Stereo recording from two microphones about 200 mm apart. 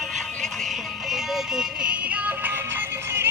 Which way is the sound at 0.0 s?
Centre (ahead or behind).